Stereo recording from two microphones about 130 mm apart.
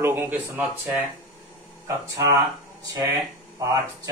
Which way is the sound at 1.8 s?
25° right (ahead or behind).